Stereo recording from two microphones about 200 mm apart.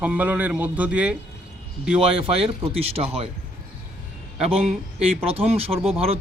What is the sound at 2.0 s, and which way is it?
Speech, 30° right (ahead or behind).